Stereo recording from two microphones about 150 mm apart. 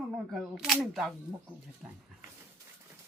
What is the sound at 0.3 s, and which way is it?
Speech, centre (ahead or behind).